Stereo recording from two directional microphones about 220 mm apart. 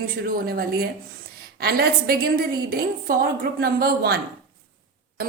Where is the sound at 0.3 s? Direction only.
40° right (ahead or behind).